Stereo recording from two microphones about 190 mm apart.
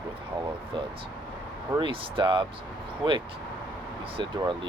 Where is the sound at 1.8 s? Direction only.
25° right (ahead or behind).